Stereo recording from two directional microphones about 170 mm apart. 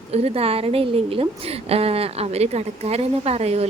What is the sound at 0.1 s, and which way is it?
Speech, 35° right (ahead or behind).